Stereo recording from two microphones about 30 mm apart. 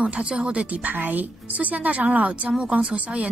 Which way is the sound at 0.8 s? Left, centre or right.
Right.